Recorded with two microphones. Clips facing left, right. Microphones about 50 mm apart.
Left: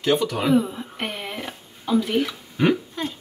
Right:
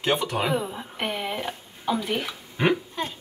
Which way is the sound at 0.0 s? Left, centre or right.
Right.